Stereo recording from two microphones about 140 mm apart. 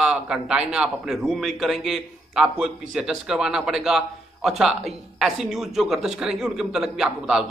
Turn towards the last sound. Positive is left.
turn(degrees=-5)  # may be behind; listen again after turning